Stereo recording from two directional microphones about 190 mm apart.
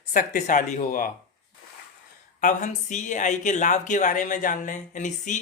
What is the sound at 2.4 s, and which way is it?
Speech, 40° left (ahead or behind).